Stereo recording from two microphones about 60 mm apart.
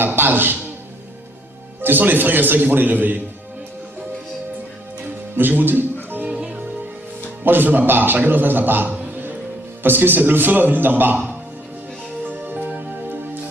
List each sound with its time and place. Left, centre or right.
0.2 s a man's voice: right
1.8 s a man's voice: right
5.4 s a man's voice: right
6.1 s music: right
6.3 s music: centre
7.4 s a man's voice: right
8.9 s music: right
9.8 s a man's voice: right
12.2 s music: right